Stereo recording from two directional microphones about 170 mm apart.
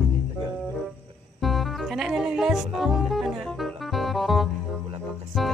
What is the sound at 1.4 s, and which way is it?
Music, centre (ahead or behind).